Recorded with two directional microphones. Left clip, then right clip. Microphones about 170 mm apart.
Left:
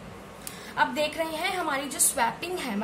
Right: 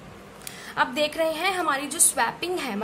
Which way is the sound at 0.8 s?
40° right (ahead or behind).